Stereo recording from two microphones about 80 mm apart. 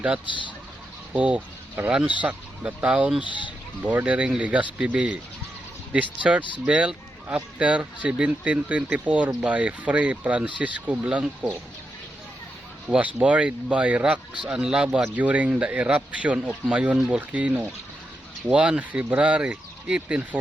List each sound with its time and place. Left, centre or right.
1.1 s speech: centre
12.9 s speech: centre